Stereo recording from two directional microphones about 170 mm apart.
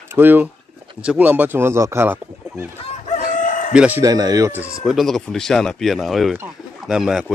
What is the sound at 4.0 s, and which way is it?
Speech, 20° right (ahead or behind).